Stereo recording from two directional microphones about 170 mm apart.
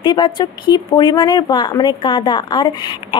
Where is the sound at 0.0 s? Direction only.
25° left (ahead or behind).